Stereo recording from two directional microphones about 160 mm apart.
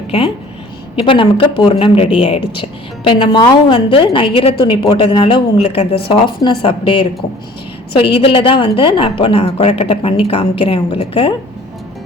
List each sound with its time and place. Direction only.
0.9 s speech: 30° left (ahead or behind)